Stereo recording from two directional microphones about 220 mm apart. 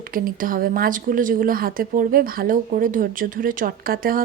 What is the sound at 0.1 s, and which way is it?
Speech, 40° right (ahead or behind).